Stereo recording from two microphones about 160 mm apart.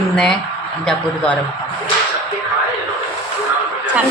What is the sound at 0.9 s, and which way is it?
Speech, 5° left (ahead or behind).